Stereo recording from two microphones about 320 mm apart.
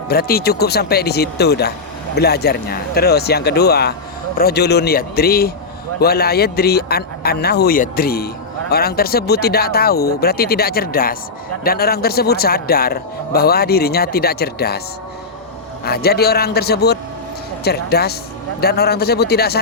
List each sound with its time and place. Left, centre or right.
0.1 s a man's voice: left
15.8 s a man's voice: left